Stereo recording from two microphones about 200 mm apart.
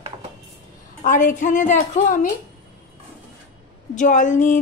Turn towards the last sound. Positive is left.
turn(degrees=40)  # may be behind; listen again after turning